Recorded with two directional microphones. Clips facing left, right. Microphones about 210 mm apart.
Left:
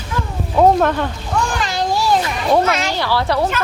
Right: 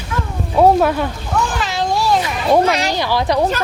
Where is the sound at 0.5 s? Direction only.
5° right (ahead or behind).